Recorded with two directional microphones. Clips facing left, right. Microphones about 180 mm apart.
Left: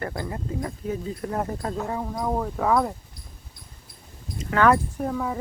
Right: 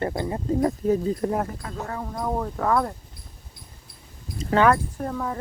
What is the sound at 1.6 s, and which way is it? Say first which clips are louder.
Speech: left 7 dB; 35° left (ahead or behind).